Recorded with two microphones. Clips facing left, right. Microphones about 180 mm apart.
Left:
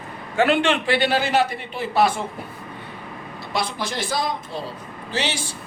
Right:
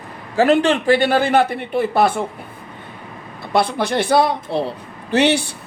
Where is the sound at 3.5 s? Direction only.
60° right (ahead or behind).